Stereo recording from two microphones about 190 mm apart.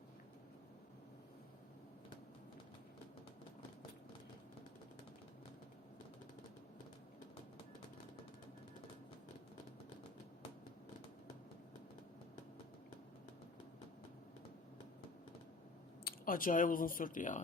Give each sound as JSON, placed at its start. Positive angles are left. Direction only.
{"t": 16.0, "sound": "speech", "side_deg": 45}